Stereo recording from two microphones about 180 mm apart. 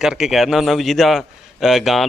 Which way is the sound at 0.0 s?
Centre (ahead or behind).